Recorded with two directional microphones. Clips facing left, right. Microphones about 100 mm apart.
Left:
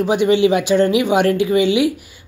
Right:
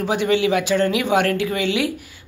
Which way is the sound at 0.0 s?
15° left (ahead or behind).